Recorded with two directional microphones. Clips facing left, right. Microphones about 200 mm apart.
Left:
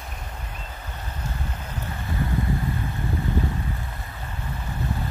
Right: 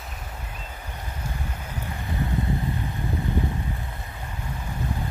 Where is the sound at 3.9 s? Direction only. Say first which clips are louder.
Even; 15° right (ahead or behind).